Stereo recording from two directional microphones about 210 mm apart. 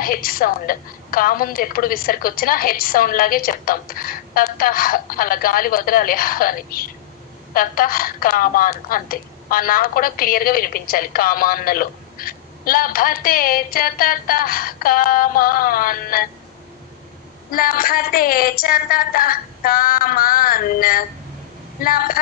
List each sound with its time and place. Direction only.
0.0 s a woman's voice: 45° left (ahead or behind)
17.5 s a woman's voice: 45° left (ahead or behind)